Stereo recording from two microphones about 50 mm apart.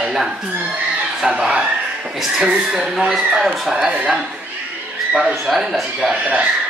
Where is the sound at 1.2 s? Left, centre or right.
Centre.